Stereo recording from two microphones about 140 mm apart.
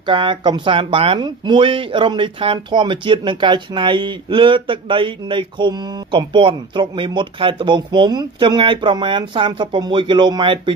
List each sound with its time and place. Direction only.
0.0 s speech: 35° right (ahead or behind)